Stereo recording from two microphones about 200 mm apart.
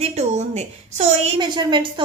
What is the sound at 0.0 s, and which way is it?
A woman's voice, 35° right (ahead or behind).